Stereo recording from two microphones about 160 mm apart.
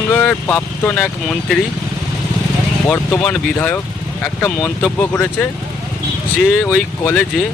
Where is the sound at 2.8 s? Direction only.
10° left (ahead or behind).